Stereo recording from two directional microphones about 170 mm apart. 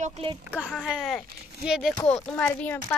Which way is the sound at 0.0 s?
40° right (ahead or behind).